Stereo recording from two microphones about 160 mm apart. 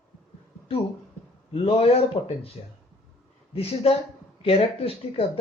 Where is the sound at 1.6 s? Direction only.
35° left (ahead or behind).